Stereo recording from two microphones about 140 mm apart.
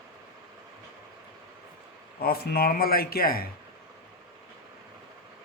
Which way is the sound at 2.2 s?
90° left.